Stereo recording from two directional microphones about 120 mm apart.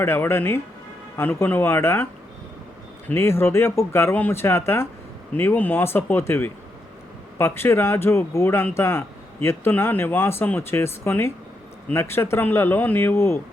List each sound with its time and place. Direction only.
0.0 s speech: 20° left (ahead or behind)
3.1 s speech: 20° left (ahead or behind)